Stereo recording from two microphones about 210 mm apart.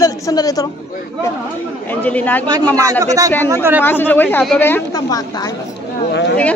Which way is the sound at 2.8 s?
15° right (ahead or behind).